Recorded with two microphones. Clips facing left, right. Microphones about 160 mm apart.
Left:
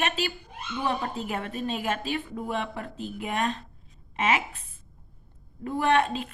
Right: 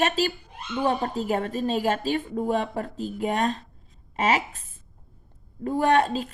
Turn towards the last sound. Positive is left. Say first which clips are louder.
# right 3 dB
turn(degrees=-35)  # may be behind; listen again after turning